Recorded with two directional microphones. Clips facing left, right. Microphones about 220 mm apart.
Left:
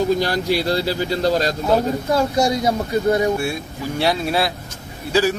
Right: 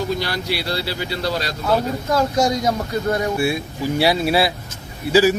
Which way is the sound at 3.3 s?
10° right (ahead or behind).